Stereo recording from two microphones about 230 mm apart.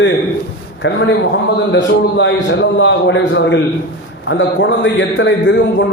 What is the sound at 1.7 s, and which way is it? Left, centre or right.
A man's voice, left.